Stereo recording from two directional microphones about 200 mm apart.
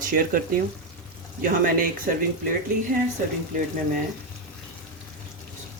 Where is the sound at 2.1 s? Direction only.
45° right (ahead or behind).